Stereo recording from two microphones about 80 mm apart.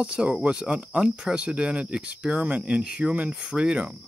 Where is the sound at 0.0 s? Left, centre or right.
Centre.